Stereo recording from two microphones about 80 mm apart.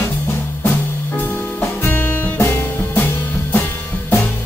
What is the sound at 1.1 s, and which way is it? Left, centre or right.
Music, left.